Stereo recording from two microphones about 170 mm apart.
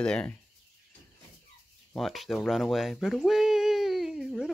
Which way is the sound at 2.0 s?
Centre (ahead or behind).